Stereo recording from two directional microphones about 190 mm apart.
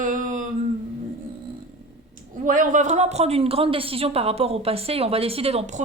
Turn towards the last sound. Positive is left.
turn(degrees=-35)  # may be behind; listen again after turning